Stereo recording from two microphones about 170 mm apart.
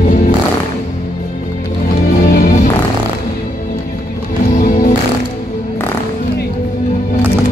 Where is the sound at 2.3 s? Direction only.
60° left (ahead or behind).